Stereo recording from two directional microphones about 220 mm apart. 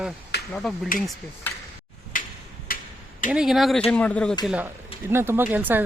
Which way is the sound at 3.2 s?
5° right (ahead or behind).